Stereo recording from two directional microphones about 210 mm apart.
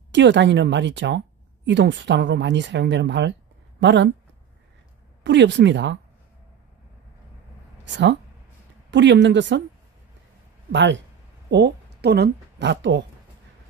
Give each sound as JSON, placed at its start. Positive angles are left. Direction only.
{"t": 0.1, "sound": "speech", "side_deg": -55}
{"t": 5.2, "sound": "speech", "side_deg": -55}
{"t": 7.8, "sound": "speech", "side_deg": -55}
{"t": 10.7, "sound": "a woman's voice", "side_deg": -60}